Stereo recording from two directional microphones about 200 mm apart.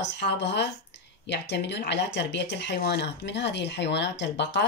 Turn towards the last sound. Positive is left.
turn(degrees=60)  # may be behind; listen again after turning